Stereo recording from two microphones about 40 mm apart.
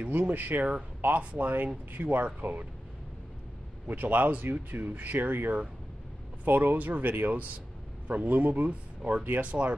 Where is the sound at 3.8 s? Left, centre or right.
Right.